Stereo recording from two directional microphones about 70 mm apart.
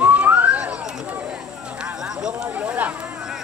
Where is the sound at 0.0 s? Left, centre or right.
Centre.